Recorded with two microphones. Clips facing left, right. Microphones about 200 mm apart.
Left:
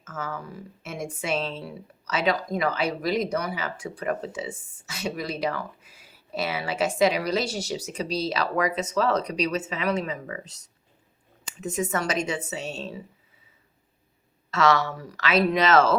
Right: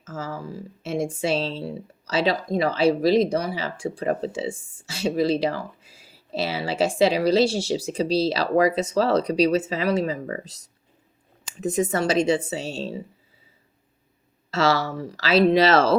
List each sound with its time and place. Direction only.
0.0 s speech: 30° right (ahead or behind)
11.6 s speech: 35° right (ahead or behind)
14.5 s speech: 30° right (ahead or behind)